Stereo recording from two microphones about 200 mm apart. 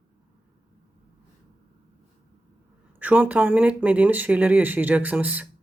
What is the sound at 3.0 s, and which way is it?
Speech, 10° right (ahead or behind).